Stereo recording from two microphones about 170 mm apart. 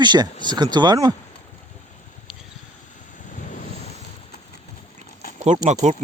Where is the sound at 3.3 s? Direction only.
50° left (ahead or behind).